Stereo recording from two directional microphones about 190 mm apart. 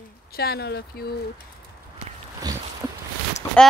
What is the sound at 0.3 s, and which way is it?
Speech, 55° left (ahead or behind).